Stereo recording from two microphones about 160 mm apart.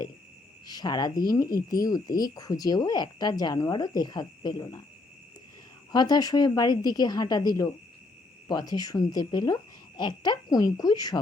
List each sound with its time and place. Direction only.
0.7 s speech: 25° left (ahead or behind)
5.9 s speech: 25° left (ahead or behind)